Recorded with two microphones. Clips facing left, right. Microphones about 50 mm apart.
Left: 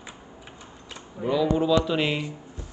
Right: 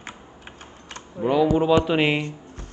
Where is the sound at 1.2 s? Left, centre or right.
Right.